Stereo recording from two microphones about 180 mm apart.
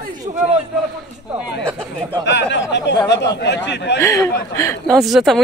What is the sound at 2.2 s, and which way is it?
Speech, 80° left.